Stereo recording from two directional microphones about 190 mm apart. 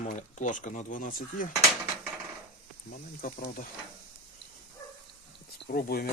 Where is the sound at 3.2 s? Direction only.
50° left (ahead or behind).